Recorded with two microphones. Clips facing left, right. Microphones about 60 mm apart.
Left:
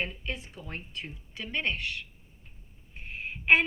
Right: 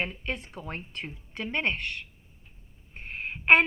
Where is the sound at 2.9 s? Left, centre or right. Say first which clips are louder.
Right 2 dB; right.